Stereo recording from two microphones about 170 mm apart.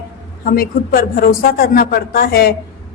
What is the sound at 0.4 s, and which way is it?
A woman's voice, 60° left (ahead or behind).